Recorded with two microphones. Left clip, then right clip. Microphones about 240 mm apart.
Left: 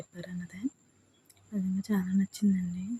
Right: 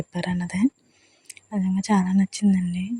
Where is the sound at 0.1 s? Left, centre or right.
Right.